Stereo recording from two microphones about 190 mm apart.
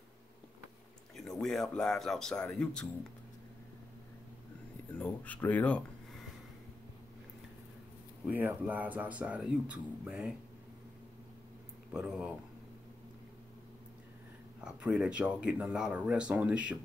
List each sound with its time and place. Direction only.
1.1 s speech: centre (ahead or behind)
4.9 s speech: 10° left (ahead or behind)
8.3 s speech: 10° right (ahead or behind)
11.9 s speech: 5° right (ahead or behind)
14.6 s speech: 5° right (ahead or behind)